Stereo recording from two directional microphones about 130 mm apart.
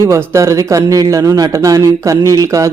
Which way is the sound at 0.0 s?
20° right (ahead or behind).